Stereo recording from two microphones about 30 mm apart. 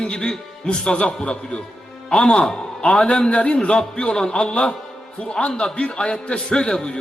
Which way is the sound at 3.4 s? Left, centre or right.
Left.